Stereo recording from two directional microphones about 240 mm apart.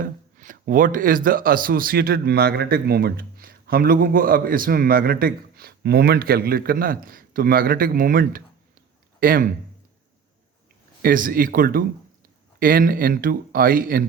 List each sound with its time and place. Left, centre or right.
0.0 s speech: right
11.0 s speech: right